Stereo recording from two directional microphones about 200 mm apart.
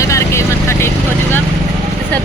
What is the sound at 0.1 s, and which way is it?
Vehicle, 15° left (ahead or behind).